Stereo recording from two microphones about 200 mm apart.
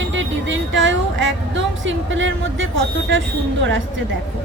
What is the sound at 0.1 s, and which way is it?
Speech, 70° right (ahead or behind).